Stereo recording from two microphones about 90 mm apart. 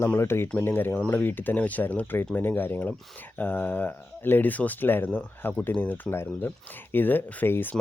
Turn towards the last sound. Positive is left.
turn(degrees=25)  # may be behind; listen again after turning